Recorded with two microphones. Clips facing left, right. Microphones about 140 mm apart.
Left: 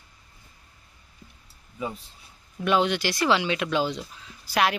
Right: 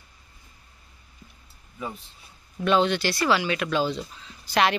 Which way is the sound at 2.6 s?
15° left (ahead or behind).